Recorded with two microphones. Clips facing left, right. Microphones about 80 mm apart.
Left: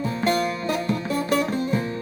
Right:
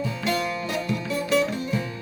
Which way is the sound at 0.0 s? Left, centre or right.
Left.